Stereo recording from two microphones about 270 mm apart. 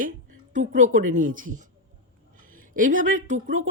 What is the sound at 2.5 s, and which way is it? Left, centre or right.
A woman's voice, right.